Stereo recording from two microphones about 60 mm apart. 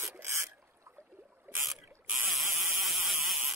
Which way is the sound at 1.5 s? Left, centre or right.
Right.